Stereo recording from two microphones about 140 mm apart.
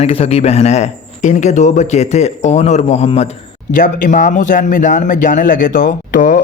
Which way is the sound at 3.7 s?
70° left (ahead or behind).